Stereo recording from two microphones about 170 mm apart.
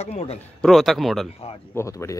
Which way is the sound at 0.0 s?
40° left (ahead or behind).